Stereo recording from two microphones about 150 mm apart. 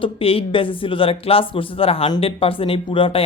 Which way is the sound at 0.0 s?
35° left (ahead or behind).